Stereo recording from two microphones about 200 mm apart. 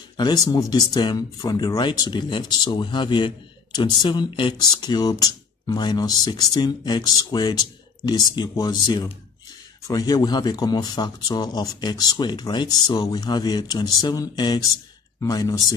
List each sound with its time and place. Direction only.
0.2 s speech: 20° left (ahead or behind)